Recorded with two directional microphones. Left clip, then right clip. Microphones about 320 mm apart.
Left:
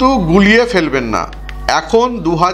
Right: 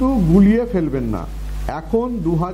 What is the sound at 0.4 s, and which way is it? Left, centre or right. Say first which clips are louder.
A man's voice: left 10 dB; centre.